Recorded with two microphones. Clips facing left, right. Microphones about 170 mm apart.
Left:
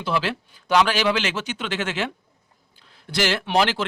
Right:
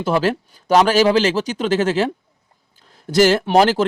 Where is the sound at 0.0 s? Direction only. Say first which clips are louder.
Right 7 dB; 45° right (ahead or behind).